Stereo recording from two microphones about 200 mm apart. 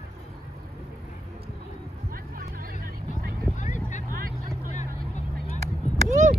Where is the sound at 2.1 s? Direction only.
45° right (ahead or behind).